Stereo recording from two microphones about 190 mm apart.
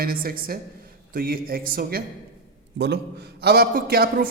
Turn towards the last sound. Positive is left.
turn(degrees=-50)  # may be behind; listen again after turning